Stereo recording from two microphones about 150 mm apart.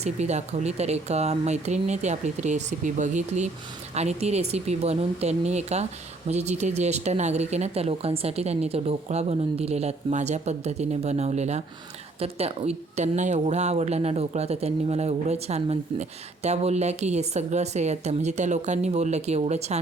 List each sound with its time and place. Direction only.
0.0 s speech: 50° right (ahead or behind)